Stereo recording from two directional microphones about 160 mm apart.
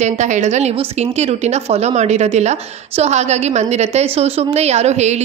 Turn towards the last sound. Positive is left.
turn(degrees=-45)  # may be behind; listen again after turning